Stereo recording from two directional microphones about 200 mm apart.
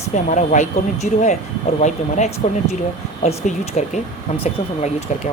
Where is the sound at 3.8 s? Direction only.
35° left (ahead or behind).